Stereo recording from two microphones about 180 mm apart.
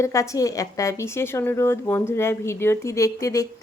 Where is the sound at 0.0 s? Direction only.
15° left (ahead or behind).